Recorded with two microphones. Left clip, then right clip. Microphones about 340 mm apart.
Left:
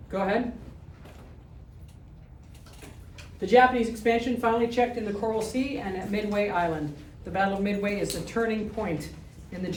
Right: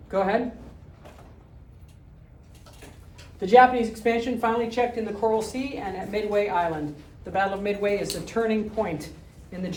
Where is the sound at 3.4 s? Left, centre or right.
Centre.